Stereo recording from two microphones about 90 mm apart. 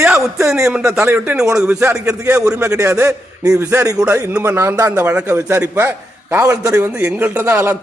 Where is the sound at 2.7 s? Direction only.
30° right (ahead or behind).